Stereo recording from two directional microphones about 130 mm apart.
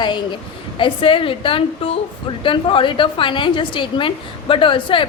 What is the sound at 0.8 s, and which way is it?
A woman's voice, 40° left (ahead or behind).